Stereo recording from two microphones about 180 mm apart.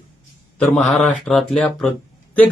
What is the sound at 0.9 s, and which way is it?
Speech, centre (ahead or behind).